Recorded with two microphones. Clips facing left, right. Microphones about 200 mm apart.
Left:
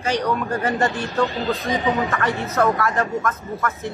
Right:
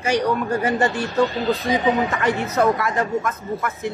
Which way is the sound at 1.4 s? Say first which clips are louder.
Right 2 dB; 15° right (ahead or behind).